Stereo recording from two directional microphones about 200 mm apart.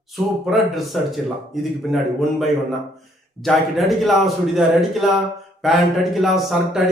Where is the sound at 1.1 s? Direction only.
Centre (ahead or behind).